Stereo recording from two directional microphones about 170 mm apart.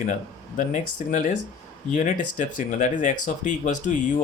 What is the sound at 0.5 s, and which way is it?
Speech, 45° left (ahead or behind).